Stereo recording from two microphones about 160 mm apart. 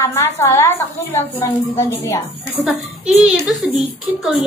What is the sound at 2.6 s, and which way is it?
A woman's voice, 5° right (ahead or behind).